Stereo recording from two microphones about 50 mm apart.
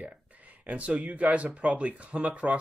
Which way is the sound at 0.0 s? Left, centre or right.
Right.